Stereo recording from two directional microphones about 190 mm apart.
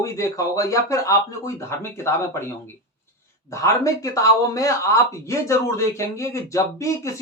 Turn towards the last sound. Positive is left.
turn(degrees=15)  # may be behind; listen again after turning